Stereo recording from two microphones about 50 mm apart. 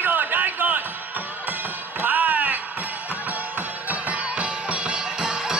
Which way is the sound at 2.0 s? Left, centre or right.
Right.